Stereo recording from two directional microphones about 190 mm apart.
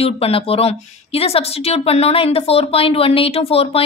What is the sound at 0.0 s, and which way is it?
A woman's voice, 30° left (ahead or behind).